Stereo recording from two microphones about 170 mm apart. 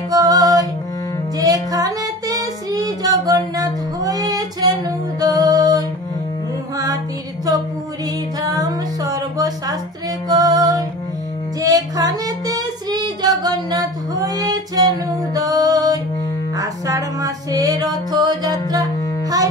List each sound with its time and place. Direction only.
0.1 s music: 20° right (ahead or behind)
1.4 s female singing: 20° right (ahead or behind)
3.5 s music: 20° right (ahead or behind)
8.4 s music: 20° right (ahead or behind)
10.2 s female singing: 20° right (ahead or behind)
16.5 s music: 20° right (ahead or behind)